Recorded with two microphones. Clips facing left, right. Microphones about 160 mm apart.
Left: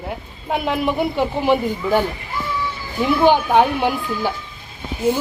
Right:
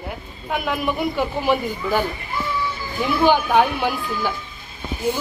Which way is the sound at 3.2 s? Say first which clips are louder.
Left 2 dB; 20° left (ahead or behind).